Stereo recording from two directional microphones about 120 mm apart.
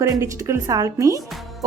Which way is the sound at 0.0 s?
25° right (ahead or behind).